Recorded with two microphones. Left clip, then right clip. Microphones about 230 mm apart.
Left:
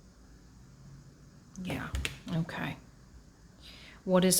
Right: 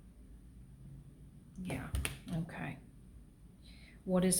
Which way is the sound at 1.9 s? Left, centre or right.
Centre.